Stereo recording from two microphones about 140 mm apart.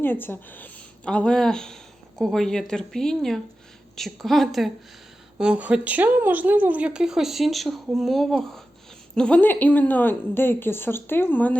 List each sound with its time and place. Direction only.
0.0 s a woman's voice: 15° left (ahead or behind)